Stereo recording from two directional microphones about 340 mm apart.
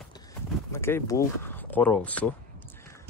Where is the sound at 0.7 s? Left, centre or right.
Centre.